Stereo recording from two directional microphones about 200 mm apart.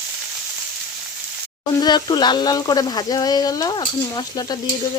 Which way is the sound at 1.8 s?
20° left (ahead or behind).